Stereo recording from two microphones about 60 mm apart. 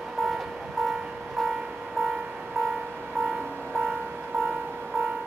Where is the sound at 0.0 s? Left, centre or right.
Centre.